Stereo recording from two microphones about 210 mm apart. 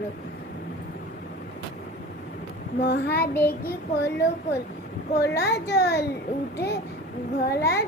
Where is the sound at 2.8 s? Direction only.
50° left (ahead or behind).